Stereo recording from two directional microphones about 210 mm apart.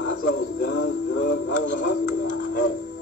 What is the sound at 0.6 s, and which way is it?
Music, 55° left (ahead or behind).